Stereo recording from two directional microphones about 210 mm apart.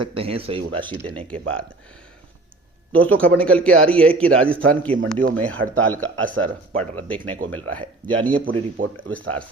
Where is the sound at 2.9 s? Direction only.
75° right (ahead or behind).